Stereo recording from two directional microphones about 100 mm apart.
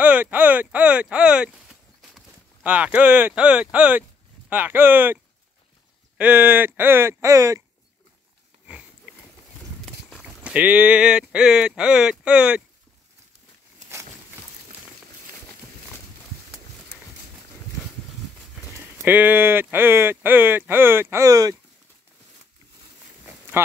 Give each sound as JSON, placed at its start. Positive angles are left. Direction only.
{"t": 0.0, "sound": "speech", "side_deg": -15}
{"t": 1.1, "sound": "a sound", "side_deg": -10}
{"t": 2.6, "sound": "speech", "side_deg": -15}
{"t": 8.6, "sound": "sniff", "side_deg": -15}
{"t": 10.0, "sound": "speech", "side_deg": -10}
{"t": 19.0, "sound": "speech", "side_deg": -20}